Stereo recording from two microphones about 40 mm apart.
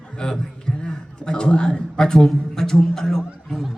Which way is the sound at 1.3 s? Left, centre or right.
Left.